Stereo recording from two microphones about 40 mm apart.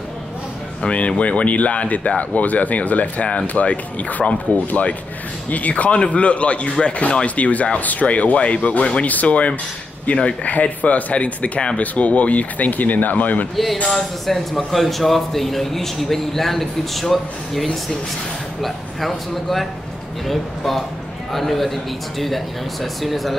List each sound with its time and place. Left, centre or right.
0.8 s speech: left
7.2 s speech: left
13.8 s a man's voice: centre